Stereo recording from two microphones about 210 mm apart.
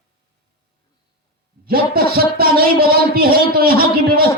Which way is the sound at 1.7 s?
45° right (ahead or behind).